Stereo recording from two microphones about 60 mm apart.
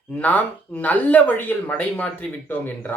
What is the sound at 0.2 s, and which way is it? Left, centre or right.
Speech, left.